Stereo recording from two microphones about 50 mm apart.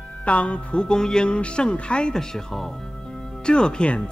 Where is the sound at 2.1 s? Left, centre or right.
Centre.